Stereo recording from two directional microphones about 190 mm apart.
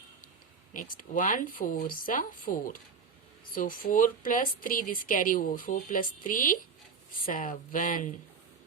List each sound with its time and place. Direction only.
0.7 s speech: 45° left (ahead or behind)